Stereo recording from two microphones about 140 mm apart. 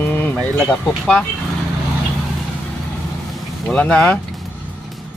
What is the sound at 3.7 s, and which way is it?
Speech, 5° left (ahead or behind).